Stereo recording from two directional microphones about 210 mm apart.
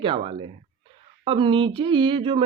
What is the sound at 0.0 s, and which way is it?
Speech, 25° right (ahead or behind).